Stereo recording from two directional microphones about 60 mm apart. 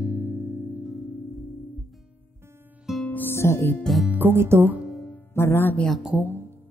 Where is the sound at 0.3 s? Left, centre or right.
Right.